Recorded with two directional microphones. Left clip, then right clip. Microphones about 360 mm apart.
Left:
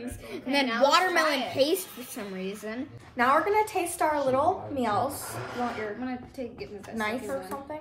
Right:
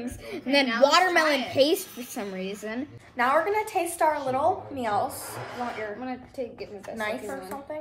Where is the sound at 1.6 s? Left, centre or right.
Right.